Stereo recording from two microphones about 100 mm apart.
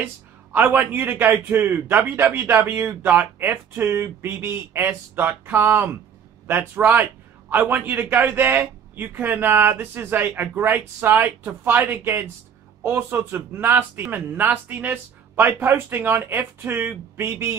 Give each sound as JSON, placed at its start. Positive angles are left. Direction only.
{"t": 0.0, "sound": "a man's voice", "side_deg": -20}